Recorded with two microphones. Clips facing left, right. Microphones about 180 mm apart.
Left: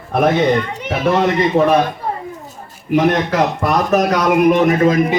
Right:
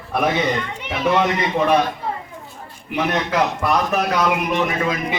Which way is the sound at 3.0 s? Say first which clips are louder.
Left 5 dB; 45° left (ahead or behind).